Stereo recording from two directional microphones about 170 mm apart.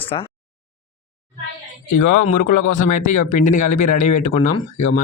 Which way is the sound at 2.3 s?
50° left (ahead or behind).